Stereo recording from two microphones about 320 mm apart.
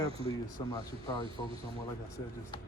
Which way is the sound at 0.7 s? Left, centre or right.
Centre.